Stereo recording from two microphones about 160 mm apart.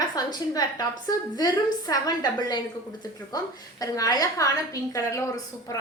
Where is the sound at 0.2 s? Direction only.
25° left (ahead or behind).